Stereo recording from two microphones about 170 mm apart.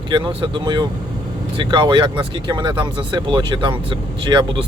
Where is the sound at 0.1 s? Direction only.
30° right (ahead or behind).